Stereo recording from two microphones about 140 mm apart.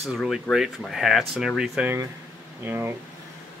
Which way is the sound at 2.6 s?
15° right (ahead or behind).